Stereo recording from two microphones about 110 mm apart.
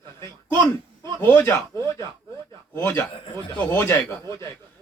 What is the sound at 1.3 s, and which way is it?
Speech, 20° left (ahead or behind).